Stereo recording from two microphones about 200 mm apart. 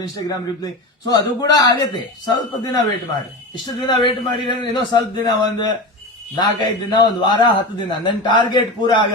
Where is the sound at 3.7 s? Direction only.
20° left (ahead or behind).